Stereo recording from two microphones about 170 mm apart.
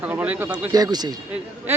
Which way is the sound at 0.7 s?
20° right (ahead or behind).